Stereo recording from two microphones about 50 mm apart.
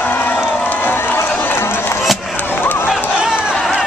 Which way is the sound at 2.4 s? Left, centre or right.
Left.